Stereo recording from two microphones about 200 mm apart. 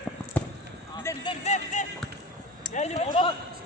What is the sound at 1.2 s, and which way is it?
Music, 35° left (ahead or behind).